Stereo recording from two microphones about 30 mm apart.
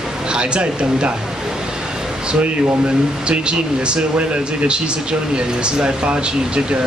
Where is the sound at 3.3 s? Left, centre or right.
Right.